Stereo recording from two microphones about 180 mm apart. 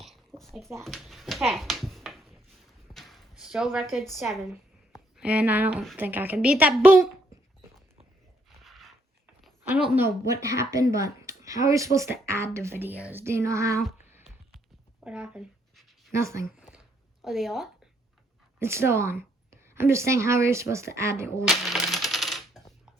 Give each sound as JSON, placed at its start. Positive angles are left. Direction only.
{"t": 0.0, "sound": "a sound", "side_deg": 0}
{"t": 2.9, "sound": "clip-clop", "side_deg": 0}
{"t": 3.4, "sound": "speech", "side_deg": -5}
{"t": 8.4, "sound": "a sound", "side_deg": 0}
{"t": 9.9, "sound": "speech", "side_deg": -15}
{"t": 15.0, "sound": "writing", "side_deg": -5}
{"t": 16.1, "sound": "speech", "side_deg": -15}
{"t": 17.2, "sound": "speech", "side_deg": 0}
{"t": 18.6, "sound": "speech", "side_deg": -15}
{"t": 21.4, "sound": "speech", "side_deg": 0}
{"t": 21.8, "sound": "coin", "side_deg": 0}